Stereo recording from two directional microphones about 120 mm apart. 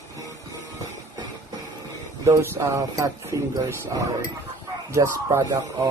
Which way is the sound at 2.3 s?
20° right (ahead or behind).